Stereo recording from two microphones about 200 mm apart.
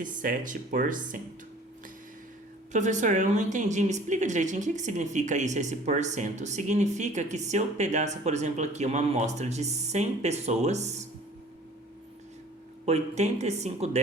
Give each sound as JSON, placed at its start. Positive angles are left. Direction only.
{"t": 0.0, "sound": "a woman's voice", "side_deg": -40}
{"t": 2.7, "sound": "a woman's voice", "side_deg": -35}
{"t": 12.8, "sound": "a woman's voice", "side_deg": -35}